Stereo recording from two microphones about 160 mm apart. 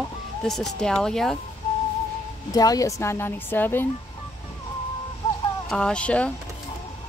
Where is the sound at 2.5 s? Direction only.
25° left (ahead or behind).